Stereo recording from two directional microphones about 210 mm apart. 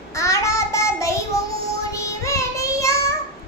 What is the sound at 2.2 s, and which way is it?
Child singing, 15° left (ahead or behind).